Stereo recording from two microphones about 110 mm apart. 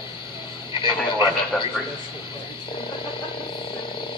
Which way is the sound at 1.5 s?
10° left (ahead or behind).